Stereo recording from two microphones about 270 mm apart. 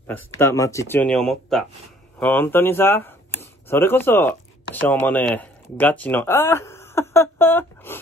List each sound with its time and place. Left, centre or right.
0.0 s speech: centre